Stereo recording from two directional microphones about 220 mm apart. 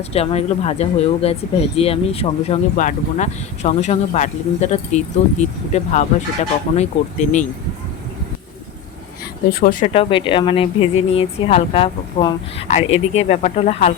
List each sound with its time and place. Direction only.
0.1 s speech: 25° left (ahead or behind)
9.5 s speech: 40° left (ahead or behind)
9.9 s speech: 25° left (ahead or behind)